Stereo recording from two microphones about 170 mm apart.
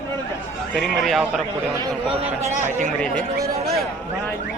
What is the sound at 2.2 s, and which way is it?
Speech, 40° right (ahead or behind).